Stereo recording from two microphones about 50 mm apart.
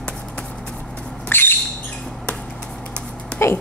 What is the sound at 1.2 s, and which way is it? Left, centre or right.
Rodents, left.